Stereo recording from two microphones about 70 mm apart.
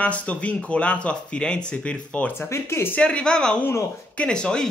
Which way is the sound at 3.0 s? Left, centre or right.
Centre.